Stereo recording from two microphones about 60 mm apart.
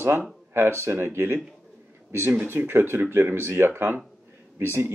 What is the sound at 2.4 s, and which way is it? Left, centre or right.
Speech, right.